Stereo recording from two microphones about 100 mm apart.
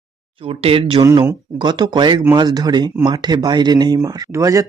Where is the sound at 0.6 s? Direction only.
65° right (ahead or behind).